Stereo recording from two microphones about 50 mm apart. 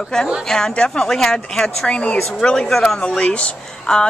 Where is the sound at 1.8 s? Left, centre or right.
Left.